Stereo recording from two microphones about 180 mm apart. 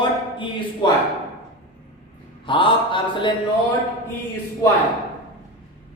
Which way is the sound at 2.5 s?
25° left (ahead or behind).